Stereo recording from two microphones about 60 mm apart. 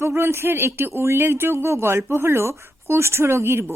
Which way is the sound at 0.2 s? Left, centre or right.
Right.